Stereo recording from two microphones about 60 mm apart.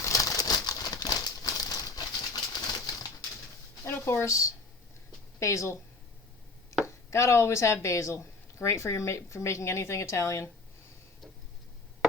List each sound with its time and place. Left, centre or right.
0.0 s crumpling: left
1.6 s bird: left
3.8 s a woman's voice: left
6.8 s speech: left